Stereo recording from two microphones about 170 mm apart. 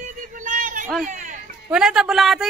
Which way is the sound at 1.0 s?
50° right (ahead or behind).